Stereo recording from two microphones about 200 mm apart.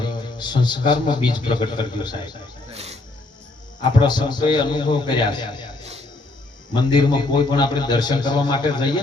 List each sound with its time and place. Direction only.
0.0 s a man's voice: 20° left (ahead or behind)
2.7 s speech: 30° right (ahead or behind)
4.0 s a man's voice: 20° left (ahead or behind)
6.9 s a man's voice: 20° left (ahead or behind)